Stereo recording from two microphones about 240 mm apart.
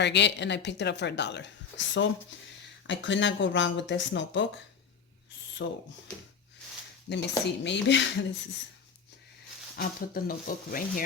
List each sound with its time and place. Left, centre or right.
0.0 s a woman's voice: left
5.6 s a woman's voice: left
7.1 s a woman's voice: left
9.7 s speech: left